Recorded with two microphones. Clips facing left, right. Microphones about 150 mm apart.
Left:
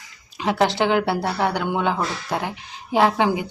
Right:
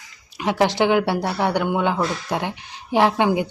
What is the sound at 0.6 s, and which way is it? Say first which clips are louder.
Speech: right 2 dB; 15° right (ahead or behind).